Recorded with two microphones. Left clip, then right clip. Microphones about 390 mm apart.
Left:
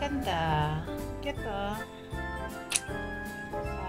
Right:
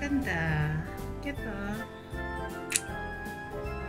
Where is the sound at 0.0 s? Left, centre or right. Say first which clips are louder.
Left 1 dB; left.